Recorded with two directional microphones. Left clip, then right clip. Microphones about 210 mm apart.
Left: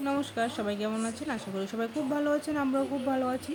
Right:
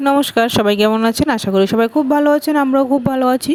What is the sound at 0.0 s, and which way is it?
Speech, 45° right (ahead or behind).